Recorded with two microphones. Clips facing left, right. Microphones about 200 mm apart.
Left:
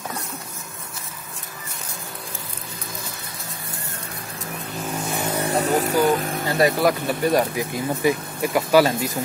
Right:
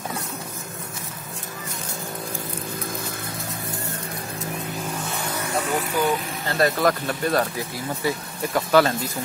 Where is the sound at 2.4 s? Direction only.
50° right (ahead or behind).